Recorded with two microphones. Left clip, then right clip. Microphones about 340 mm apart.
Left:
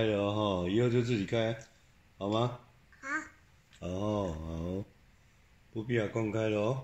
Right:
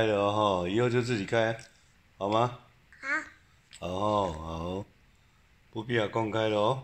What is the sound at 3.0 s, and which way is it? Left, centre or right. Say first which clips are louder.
Babbling: right 5 dB; centre.